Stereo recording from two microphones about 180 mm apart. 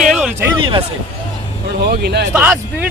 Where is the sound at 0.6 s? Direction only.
30° right (ahead or behind).